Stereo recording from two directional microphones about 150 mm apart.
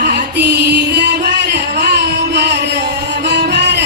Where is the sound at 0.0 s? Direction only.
90° right.